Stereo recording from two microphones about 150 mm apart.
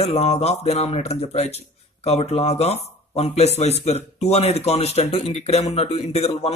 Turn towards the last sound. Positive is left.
turn(degrees=45)  # may be behind; listen again after turning